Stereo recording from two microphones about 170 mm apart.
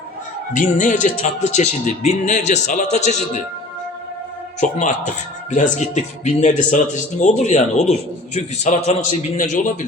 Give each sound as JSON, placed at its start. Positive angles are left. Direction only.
{"t": 0.5, "sound": "speech", "side_deg": 50}
{"t": 4.8, "sound": "speech", "side_deg": 45}